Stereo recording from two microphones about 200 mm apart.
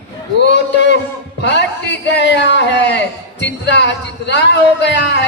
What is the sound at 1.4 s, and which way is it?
Speech, 60° left (ahead or behind).